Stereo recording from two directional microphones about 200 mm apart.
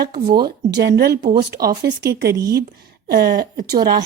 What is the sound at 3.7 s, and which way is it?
Speech, 20° right (ahead or behind).